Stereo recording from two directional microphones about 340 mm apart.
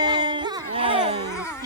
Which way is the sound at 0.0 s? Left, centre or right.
Centre.